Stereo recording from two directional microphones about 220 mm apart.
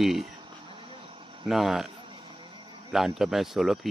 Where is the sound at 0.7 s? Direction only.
20° right (ahead or behind).